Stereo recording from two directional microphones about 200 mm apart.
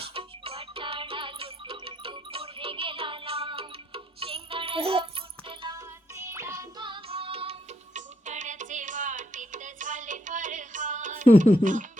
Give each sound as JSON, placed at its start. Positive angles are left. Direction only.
{"t": 0.0, "sound": "music", "side_deg": -25}
{"t": 6.1, "sound": "music", "side_deg": -15}
{"t": 11.6, "sound": "speech", "side_deg": -40}